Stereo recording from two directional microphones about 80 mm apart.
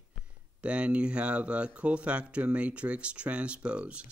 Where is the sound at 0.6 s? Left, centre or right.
Centre.